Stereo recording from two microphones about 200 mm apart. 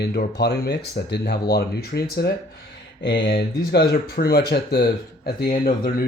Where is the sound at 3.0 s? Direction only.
65° left (ahead or behind).